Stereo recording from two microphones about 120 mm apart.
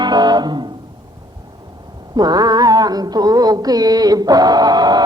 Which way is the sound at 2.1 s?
35° right (ahead or behind).